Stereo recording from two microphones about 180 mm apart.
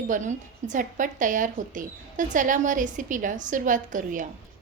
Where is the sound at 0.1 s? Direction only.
45° right (ahead or behind).